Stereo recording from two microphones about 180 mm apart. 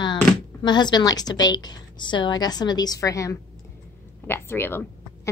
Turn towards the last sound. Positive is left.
turn(degrees=10)  # may be behind; listen again after turning